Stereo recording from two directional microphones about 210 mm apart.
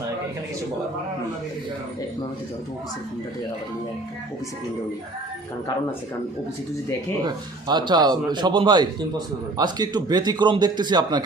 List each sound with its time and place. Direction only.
7.3 s a man's voice: 20° right (ahead or behind)